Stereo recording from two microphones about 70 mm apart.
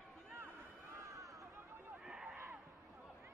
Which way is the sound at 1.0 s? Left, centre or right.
Right.